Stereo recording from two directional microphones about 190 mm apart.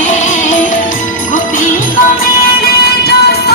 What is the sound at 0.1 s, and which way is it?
Music, 40° left (ahead or behind).